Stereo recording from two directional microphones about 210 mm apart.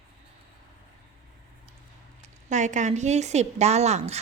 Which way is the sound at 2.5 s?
35° right (ahead or behind).